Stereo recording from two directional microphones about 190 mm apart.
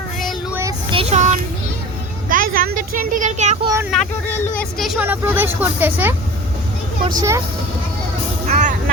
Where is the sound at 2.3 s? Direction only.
50° right (ahead or behind).